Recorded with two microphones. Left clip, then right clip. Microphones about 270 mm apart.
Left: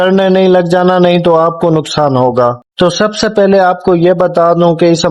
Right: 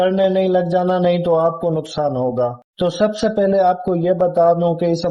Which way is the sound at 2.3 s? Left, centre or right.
Left.